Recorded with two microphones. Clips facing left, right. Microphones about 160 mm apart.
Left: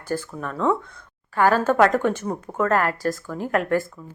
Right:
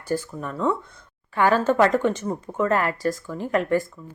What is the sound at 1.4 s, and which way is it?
Speech, 50° left (ahead or behind).